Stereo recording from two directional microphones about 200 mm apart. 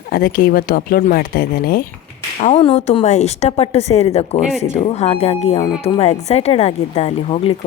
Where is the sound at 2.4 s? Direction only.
30° left (ahead or behind).